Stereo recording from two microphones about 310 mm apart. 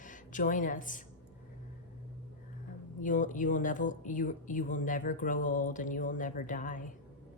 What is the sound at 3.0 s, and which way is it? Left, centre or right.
Speech, left.